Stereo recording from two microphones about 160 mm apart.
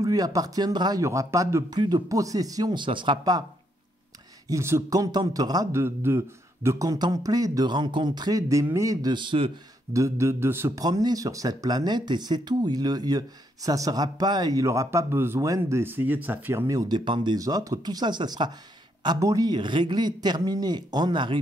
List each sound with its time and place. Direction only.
0.0 s a man's voice: 20° right (ahead or behind)
4.5 s a man's voice: 15° right (ahead or behind)
9.9 s a man's voice: 20° right (ahead or behind)